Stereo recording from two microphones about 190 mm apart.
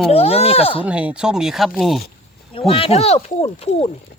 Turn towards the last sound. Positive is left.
turn(degrees=30)  # may be behind; listen again after turning